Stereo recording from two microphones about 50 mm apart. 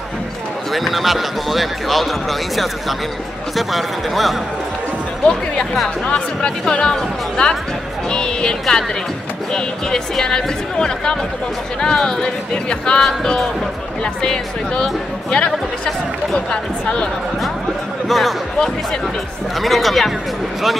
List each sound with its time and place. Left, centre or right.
0.7 s speech: centre
3.5 s speech: centre
6.0 s speech: left
18.0 s speech: centre